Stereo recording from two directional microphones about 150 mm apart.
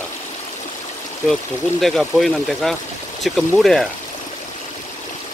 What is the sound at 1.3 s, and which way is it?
Speech, centre (ahead or behind).